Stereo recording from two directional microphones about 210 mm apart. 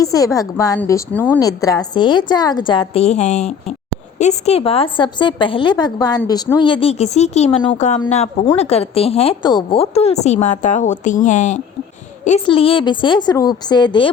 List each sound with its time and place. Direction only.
0.0 s a woman's voice: 15° left (ahead or behind)